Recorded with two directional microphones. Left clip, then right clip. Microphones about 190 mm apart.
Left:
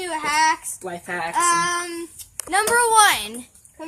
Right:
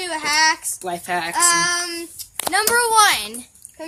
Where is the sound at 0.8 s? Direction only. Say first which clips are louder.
Right 4 dB; 55° right (ahead or behind).